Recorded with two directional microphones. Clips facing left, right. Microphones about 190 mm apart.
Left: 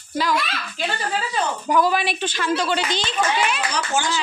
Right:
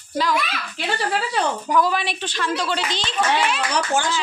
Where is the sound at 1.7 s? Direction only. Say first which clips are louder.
Left 3 dB; 5° left (ahead or behind).